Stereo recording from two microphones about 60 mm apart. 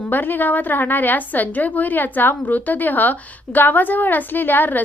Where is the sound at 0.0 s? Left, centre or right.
Left.